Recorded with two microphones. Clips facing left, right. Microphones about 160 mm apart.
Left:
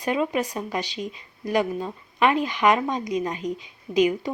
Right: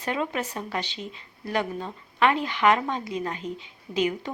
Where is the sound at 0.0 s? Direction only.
15° left (ahead or behind).